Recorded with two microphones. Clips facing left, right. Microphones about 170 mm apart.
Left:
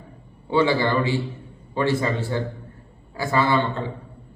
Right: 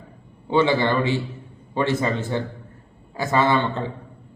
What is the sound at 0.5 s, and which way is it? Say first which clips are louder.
A man's voice: right 1 dB; 20° right (ahead or behind).